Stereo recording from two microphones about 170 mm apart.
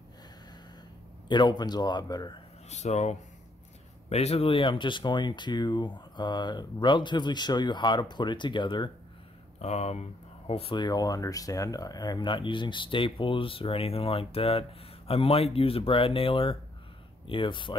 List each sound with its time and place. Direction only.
1.3 s speech: 25° left (ahead or behind)
2.7 s speech: 40° left (ahead or behind)
9.6 s speech: 40° left (ahead or behind)